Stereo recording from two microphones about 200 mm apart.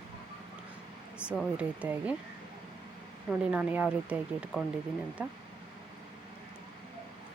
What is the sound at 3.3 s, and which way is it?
Speech, 5° right (ahead or behind).